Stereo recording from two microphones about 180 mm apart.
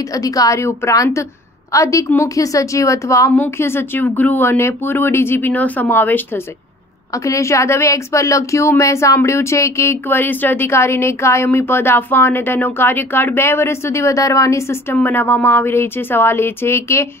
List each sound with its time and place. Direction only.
0.1 s speech: 20° left (ahead or behind)